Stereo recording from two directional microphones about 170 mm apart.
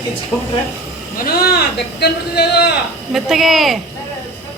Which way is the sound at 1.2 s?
65° left (ahead or behind).